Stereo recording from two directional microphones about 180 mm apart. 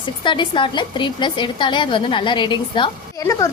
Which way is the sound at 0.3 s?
25° left (ahead or behind).